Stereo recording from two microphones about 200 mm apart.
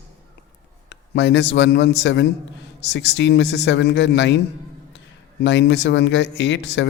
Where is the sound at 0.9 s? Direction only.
60° left (ahead or behind).